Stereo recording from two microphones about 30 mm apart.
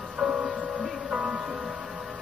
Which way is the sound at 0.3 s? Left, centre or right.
Right.